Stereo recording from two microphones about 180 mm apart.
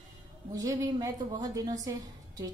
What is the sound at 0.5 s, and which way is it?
A woman's voice, 20° right (ahead or behind).